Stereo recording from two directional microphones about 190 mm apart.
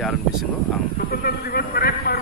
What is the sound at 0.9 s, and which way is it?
Speech, 50° left (ahead or behind).